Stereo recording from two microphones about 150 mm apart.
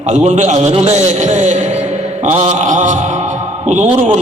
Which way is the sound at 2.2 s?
45° right (ahead or behind).